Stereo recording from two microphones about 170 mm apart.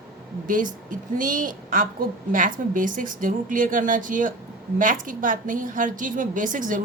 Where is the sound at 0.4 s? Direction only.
50° right (ahead or behind).